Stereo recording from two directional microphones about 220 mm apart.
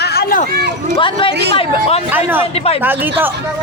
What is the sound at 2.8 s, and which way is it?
Speech, 10° right (ahead or behind).